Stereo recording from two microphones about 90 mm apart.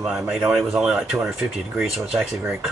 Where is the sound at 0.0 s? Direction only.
5° right (ahead or behind).